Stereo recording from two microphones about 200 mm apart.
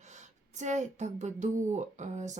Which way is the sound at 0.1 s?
35° right (ahead or behind).